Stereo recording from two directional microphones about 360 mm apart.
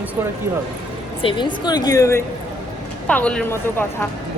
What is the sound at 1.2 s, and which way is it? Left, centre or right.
A woman's voice, centre.